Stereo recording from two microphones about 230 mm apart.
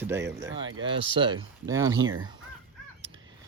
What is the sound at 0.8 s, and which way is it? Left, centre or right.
Speech, right.